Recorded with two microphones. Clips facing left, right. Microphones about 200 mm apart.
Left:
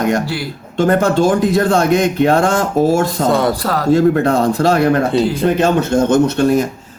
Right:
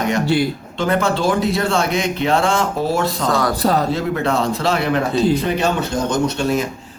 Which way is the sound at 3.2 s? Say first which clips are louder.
Left 5 dB; 25° left (ahead or behind).